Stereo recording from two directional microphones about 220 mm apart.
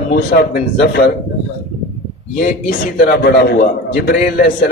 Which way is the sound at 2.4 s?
40° left (ahead or behind).